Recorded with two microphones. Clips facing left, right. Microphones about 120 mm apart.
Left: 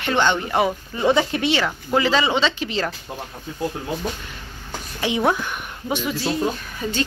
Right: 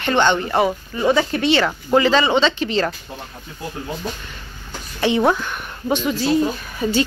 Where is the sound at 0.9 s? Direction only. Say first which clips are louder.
Even; 25° left (ahead or behind).